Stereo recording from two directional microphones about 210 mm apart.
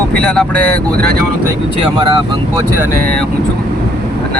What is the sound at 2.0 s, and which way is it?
Speech, 20° right (ahead or behind).